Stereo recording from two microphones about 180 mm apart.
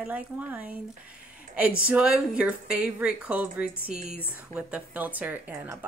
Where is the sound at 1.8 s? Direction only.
5° right (ahead or behind).